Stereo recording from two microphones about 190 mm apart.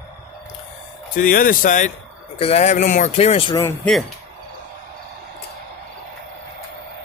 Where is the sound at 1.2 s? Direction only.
45° left (ahead or behind); by 3.6 s 30° left (ahead or behind).